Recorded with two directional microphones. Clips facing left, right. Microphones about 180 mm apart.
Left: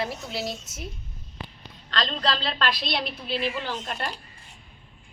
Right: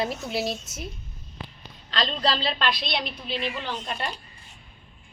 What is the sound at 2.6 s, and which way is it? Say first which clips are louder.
A woman's voice: even; 5° left (ahead or behind).